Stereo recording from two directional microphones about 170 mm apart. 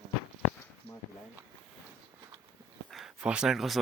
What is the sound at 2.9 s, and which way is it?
Speech, 5° right (ahead or behind).